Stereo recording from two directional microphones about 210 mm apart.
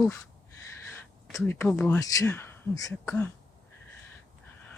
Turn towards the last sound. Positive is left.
turn(degrees=10)  # may be behind; listen again after turning